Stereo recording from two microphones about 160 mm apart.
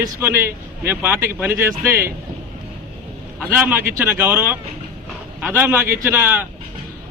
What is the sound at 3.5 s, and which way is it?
A man's voice, 15° right (ahead or behind).